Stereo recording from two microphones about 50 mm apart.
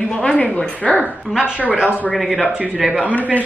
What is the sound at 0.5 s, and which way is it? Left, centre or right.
Speech, left.